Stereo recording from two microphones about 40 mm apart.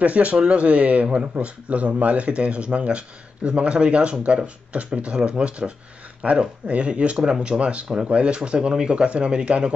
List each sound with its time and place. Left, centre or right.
0.0 s speech: right
1.0 s speech: right
1.3 s speech: right